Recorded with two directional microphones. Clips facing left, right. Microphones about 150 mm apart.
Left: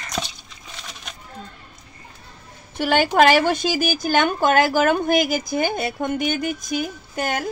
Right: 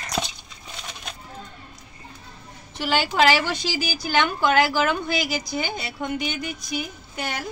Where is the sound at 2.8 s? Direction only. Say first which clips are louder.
Left 5 dB; 55° left (ahead or behind).